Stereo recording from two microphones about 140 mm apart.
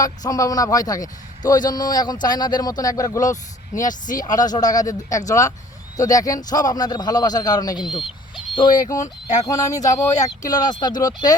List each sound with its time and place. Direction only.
0.0 s a man's voice: 25° left (ahead or behind)
3.8 s speech: 65° left (ahead or behind)
4.1 s a man's voice: 30° left (ahead or behind)